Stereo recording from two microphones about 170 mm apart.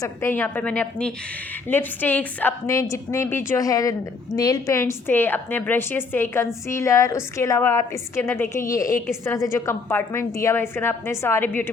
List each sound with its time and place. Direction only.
0.0 s a woman's voice: 15° left (ahead or behind)